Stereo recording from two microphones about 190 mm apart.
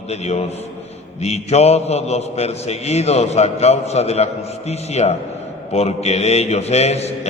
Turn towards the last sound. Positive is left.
turn(degrees=35)  # may be behind; listen again after turning